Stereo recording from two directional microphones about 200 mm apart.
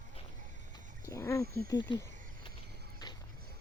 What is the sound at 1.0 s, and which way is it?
Speech, 15° left (ahead or behind).